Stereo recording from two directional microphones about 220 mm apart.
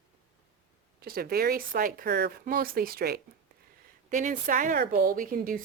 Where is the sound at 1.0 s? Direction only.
45° right (ahead or behind).